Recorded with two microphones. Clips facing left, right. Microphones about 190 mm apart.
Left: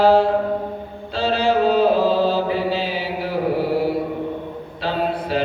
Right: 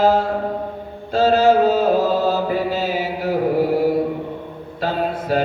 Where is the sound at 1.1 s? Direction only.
45° right (ahead or behind).